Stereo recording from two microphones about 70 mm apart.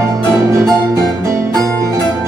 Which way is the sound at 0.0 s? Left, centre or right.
Right.